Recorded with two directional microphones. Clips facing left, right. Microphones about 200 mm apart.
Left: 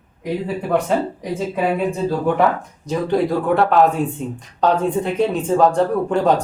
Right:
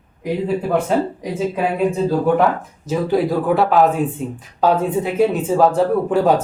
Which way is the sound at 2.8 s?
5° right (ahead or behind).